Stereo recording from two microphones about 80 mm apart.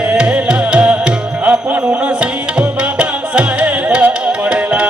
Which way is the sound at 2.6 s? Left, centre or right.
Centre.